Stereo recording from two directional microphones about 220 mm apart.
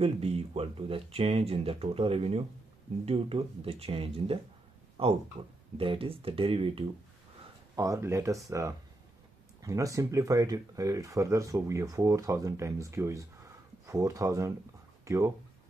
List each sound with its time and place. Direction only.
0.0 s speech: 25° right (ahead or behind)